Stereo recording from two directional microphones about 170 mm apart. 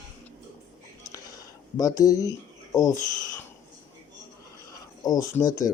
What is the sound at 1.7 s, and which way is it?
Speech, 20° left (ahead or behind).